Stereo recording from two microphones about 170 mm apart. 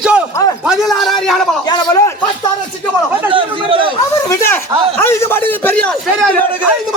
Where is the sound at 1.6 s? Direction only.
20° left (ahead or behind).